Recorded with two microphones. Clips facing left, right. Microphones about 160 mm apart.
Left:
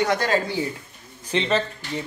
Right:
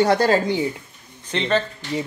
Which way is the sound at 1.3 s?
Centre (ahead or behind).